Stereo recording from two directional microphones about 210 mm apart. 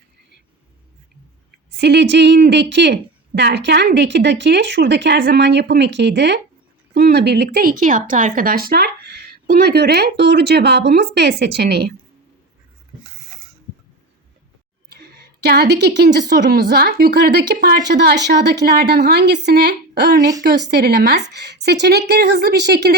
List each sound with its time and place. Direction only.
1.5 s speech: 55° right (ahead or behind)
14.8 s speech: 50° right (ahead or behind)